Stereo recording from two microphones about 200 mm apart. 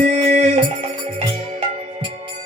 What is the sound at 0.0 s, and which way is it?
Music, 35° right (ahead or behind).